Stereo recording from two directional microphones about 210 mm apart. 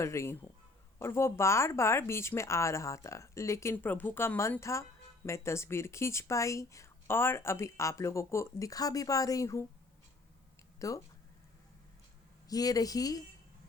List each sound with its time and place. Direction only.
0.0 s speech: 15° left (ahead or behind)
10.8 s speech: 15° left (ahead or behind)
12.5 s speech: 15° left (ahead or behind)